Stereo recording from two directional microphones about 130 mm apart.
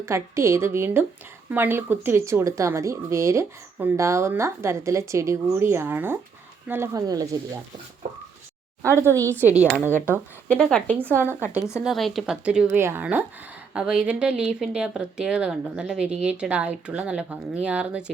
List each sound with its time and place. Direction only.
0.0 s speech: 20° right (ahead or behind)
8.9 s speech: 20° right (ahead or behind)
9.7 s speech: 15° left (ahead or behind); by 18.0 s 10° right (ahead or behind)